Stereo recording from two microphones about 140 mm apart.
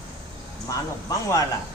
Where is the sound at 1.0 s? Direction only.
25° left (ahead or behind).